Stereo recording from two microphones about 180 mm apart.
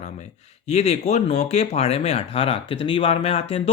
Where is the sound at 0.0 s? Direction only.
40° left (ahead or behind).